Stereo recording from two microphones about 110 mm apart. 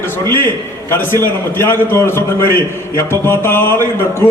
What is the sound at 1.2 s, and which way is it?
A man's voice, 20° left (ahead or behind).